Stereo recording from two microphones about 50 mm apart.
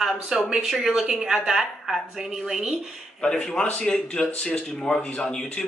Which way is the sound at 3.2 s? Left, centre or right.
Centre.